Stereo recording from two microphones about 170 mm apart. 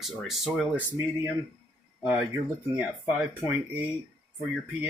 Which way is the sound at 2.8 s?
5° right (ahead or behind).